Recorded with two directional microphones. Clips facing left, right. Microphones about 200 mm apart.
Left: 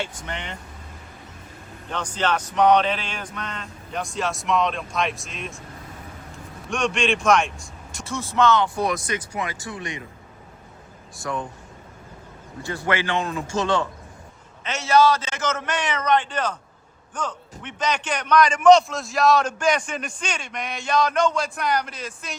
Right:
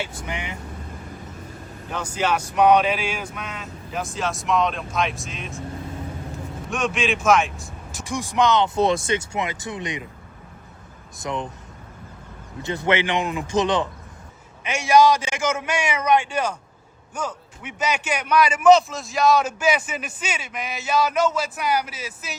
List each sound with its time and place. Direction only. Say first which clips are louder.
0.0 s speech: right 1 dB; 10° right (ahead or behind)
1.9 s speech: right 1 dB; 10° right (ahead or behind)
6.7 s a man's voice: left 1 dB; centre (ahead or behind)
8.0 s speech: even; 15° right (ahead or behind)
11.2 s speech: right 1 dB; 20° right (ahead or behind)
12.6 s a man's voice: right 3 dB; 20° right (ahead or behind)